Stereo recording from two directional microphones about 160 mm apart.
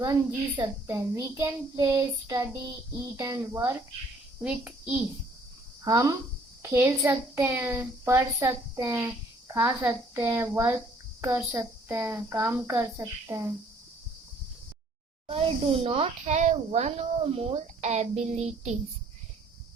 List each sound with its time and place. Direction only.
0.0 s a child's voice: 25° right (ahead or behind)
4.4 s a woman's voice: 5° right (ahead or behind)
5.8 s a child's voice: 20° right (ahead or behind)
15.3 s speech: 35° right (ahead or behind)